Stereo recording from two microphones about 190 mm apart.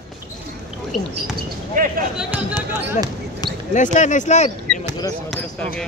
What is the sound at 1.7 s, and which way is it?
Speech, 45° right (ahead or behind).